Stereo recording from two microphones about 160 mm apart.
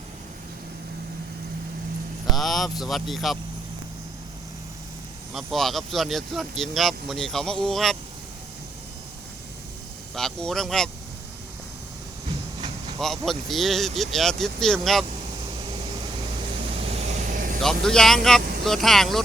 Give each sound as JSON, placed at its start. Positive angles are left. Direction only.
{"t": 2.3, "sound": "speech", "side_deg": 0}
{"t": 5.3, "sound": "speech", "side_deg": 0}
{"t": 10.2, "sound": "speech", "side_deg": 5}
{"t": 13.0, "sound": "speech", "side_deg": 0}
{"t": 16.4, "sound": "vehicle", "side_deg": -35}
{"t": 17.6, "sound": "speech", "side_deg": 5}